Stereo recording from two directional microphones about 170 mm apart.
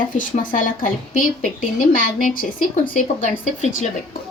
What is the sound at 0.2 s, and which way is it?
A woman's voice, 50° left (ahead or behind).